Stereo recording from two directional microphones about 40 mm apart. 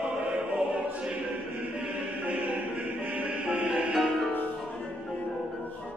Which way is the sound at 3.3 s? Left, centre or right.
Right.